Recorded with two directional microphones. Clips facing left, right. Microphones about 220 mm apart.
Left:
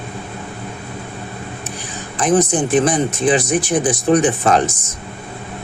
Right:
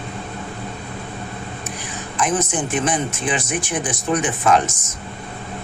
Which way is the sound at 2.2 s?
35° left (ahead or behind).